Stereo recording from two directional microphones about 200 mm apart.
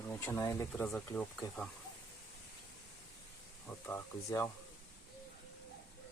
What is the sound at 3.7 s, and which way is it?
Speech, 10° left (ahead or behind).